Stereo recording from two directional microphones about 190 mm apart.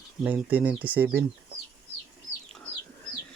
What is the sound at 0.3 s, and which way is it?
Speech, 10° right (ahead or behind).